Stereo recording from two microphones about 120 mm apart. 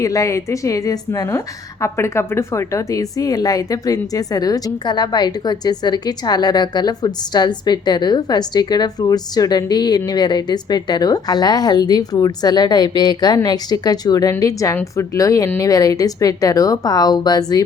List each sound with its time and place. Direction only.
0.0 s a woman's voice: 25° left (ahead or behind)